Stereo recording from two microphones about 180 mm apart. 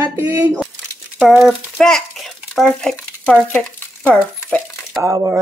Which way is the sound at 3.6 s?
5° left (ahead or behind).